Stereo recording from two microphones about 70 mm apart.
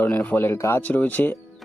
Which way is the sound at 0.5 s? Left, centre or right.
Left.